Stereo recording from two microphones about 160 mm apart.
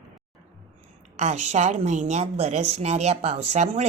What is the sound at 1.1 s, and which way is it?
A woman's voice, 45° right (ahead or behind).